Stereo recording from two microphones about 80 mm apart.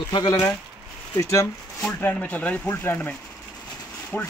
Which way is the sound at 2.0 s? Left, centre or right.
Left.